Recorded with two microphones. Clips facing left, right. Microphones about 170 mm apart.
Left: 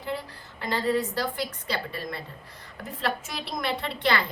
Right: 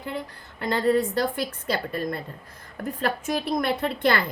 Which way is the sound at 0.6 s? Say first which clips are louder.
Right 4 dB; 50° right (ahead or behind).